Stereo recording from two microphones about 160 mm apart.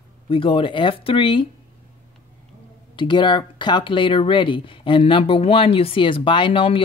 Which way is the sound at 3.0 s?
30° left (ahead or behind).